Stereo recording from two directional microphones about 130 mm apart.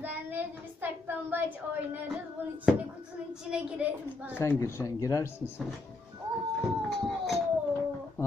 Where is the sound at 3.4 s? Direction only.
5° right (ahead or behind).